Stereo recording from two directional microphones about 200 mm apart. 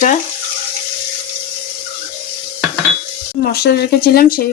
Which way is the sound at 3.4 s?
50° left (ahead or behind).